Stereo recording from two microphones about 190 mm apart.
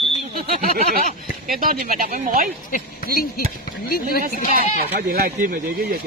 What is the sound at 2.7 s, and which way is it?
Speech, 50° left (ahead or behind).